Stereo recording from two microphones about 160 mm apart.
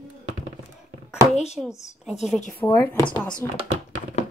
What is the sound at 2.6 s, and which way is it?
Speech, 10° left (ahead or behind).